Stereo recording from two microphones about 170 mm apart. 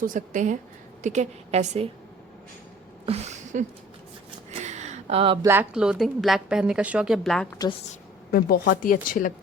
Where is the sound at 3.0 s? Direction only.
40° right (ahead or behind).